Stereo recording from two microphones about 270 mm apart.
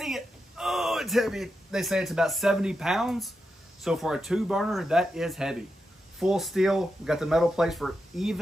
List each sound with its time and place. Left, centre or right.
0.0 s speech: centre